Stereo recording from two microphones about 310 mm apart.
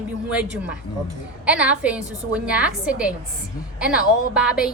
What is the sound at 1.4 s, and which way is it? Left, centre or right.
A woman's voice, centre.